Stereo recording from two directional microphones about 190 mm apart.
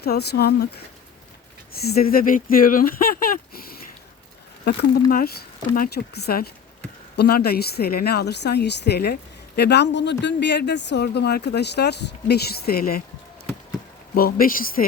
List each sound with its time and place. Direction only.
0.0 s speech: 60° left (ahead or behind)
1.8 s speech: 55° left (ahead or behind)
14.2 s speech: 50° left (ahead or behind)